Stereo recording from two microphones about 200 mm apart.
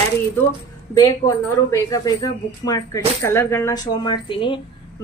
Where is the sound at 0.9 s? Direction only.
20° left (ahead or behind).